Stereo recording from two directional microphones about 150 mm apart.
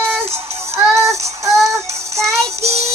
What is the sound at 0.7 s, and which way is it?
Music, 20° right (ahead or behind).